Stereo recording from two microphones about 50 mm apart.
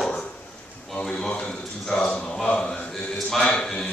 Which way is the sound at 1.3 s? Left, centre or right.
Left.